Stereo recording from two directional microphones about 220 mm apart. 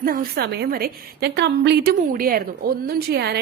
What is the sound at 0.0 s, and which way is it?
A woman's voice, 40° right (ahead or behind).